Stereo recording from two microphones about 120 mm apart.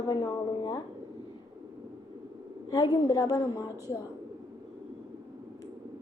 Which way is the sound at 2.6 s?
30° left (ahead or behind).